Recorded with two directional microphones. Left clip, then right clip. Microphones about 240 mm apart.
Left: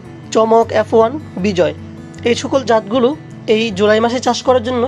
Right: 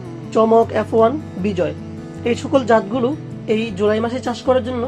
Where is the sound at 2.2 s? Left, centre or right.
Left.